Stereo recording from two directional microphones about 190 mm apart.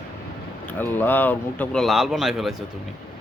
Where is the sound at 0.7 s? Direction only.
10° left (ahead or behind).